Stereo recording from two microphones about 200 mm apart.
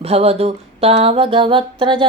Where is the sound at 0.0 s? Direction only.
30° right (ahead or behind).